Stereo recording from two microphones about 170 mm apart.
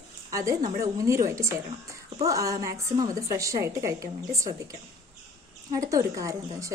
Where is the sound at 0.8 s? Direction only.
20° right (ahead or behind).